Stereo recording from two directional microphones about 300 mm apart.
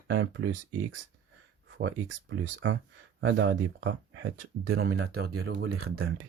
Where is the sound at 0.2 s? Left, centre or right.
Right.